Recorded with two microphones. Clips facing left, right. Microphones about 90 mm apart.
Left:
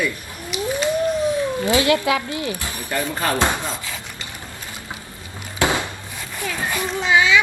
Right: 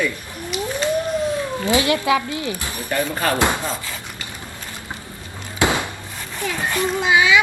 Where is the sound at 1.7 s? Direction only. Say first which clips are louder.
Even; 25° right (ahead or behind).